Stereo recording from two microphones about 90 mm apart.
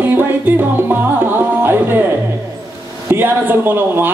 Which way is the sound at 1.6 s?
25° right (ahead or behind).